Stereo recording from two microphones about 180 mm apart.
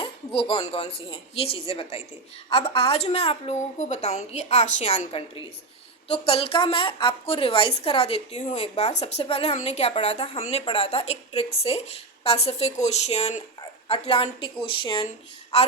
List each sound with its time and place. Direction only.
0.3 s a woman's voice: 30° left (ahead or behind)